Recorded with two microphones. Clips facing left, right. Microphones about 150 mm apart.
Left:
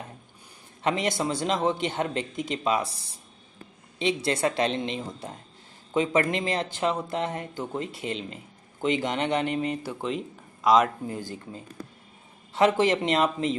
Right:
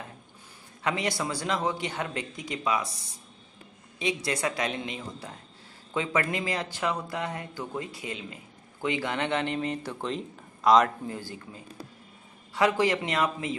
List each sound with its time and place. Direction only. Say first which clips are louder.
0.8 s speech: left 3 dB; 20° left (ahead or behind)
4.0 s speech: left 4 dB; 30° left (ahead or behind)
6.3 s speech: left 3 dB; 25° left (ahead or behind); by 10.9 s 5° left (ahead or behind)
11.1 s speech: left 3 dB; 20° left (ahead or behind)
12.5 s speech: left 3 dB; 25° left (ahead or behind)